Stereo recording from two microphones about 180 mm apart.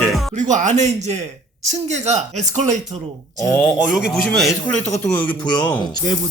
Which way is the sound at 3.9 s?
Centre (ahead or behind).